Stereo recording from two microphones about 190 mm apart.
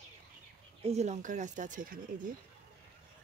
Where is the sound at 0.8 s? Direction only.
35° right (ahead or behind).